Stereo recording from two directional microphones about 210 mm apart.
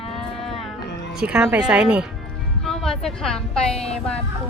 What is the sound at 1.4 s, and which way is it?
A woman's voice, 5° right (ahead or behind).